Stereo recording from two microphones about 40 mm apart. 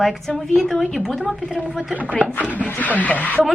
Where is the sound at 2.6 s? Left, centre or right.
Left.